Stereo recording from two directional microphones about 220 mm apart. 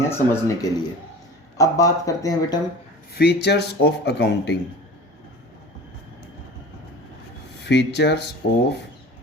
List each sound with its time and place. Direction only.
0.0 s speech: 10° left (ahead or behind)
3.2 s speech: 50° left (ahead or behind)
7.6 s speech: 50° left (ahead or behind)